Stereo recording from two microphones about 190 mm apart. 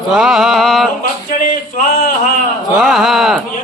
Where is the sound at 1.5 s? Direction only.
45° left (ahead or behind).